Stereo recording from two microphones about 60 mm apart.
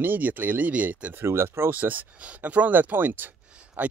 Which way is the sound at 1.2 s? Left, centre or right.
Right.